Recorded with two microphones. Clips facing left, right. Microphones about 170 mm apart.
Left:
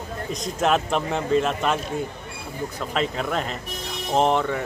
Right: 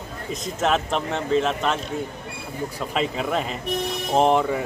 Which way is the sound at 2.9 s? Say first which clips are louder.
Right 1 dB; 5° right (ahead or behind).